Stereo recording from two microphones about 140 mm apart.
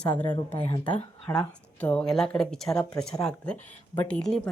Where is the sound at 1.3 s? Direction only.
10° left (ahead or behind).